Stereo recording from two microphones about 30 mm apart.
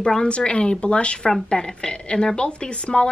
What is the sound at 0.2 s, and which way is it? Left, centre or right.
A woman's voice, left.